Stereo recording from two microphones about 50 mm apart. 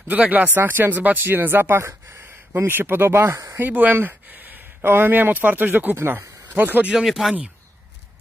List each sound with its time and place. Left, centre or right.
0.1 s speech: right
0.5 s speech: right
3.5 s speech: right
6.5 s speech: right
7.1 s speech: centre